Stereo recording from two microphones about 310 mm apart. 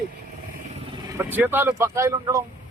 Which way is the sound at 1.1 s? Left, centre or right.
Centre.